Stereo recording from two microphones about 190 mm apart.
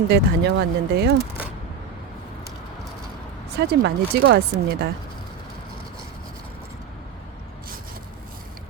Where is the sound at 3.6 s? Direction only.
60° right (ahead or behind).